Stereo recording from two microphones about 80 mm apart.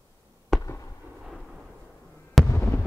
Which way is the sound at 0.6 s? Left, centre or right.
Left.